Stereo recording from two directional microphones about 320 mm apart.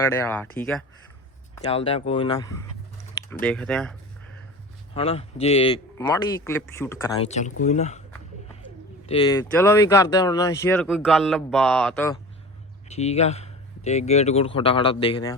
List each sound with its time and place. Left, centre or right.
0.0 s speech: centre
1.5 s speech: centre
4.9 s speech: centre
7.3 s speech: left
9.0 s speech: centre
12.9 s speech: centre